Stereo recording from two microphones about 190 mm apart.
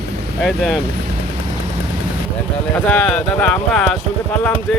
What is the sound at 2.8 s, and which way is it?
A man's voice, 10° left (ahead or behind).